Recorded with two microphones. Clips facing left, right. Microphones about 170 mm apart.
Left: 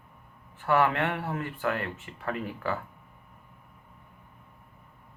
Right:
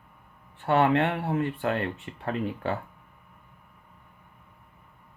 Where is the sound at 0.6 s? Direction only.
25° right (ahead or behind).